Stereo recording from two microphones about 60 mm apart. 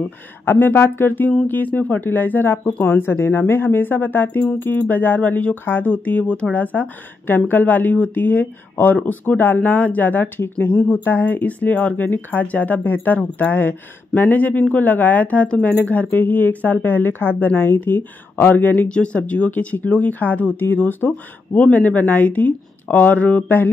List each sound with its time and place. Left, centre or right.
0.5 s speech: left
18.9 s speech: centre